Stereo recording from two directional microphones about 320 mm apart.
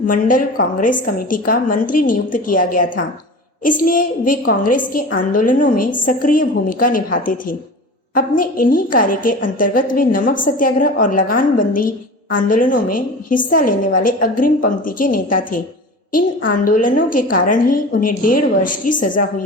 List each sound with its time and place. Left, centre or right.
0.1 s a woman's voice: left